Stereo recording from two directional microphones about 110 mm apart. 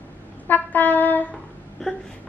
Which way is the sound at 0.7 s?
15° left (ahead or behind).